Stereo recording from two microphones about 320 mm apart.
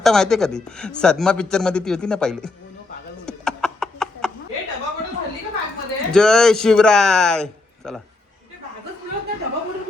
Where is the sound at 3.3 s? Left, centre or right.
Centre.